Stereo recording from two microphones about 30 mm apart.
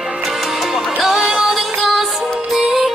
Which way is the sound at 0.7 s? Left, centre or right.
Centre.